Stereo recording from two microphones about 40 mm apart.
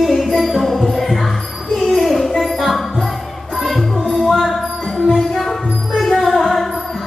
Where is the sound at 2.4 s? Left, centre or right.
Centre.